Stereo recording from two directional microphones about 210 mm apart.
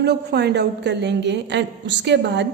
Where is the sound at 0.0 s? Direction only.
50° right (ahead or behind).